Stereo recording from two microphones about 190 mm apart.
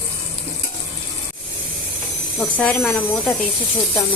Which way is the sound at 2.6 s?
5° left (ahead or behind).